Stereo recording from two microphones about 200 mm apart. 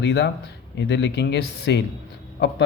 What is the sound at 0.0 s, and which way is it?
Speech, 60° left (ahead or behind).